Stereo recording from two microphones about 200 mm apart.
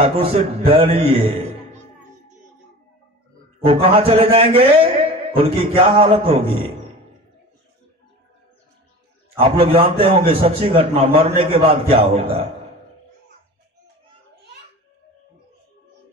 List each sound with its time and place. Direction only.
0.0 s a man's voice: 30° right (ahead or behind)
3.6 s a man's voice: 25° right (ahead or behind)
9.4 s a man's voice: 25° right (ahead or behind)